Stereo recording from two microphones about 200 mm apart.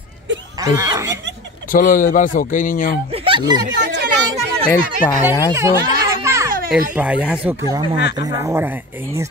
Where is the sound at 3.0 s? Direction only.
25° right (ahead or behind).